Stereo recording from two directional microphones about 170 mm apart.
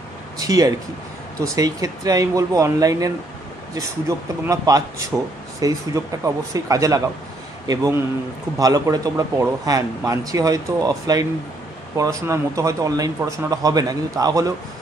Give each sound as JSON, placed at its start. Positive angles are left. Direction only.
{"t": 0.4, "sound": "speech", "side_deg": -20}